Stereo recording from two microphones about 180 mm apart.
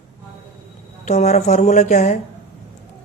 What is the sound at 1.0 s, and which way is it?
A woman's voice, 40° left (ahead or behind).